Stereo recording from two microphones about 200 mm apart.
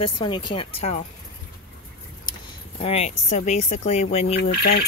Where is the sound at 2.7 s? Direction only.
30° left (ahead or behind).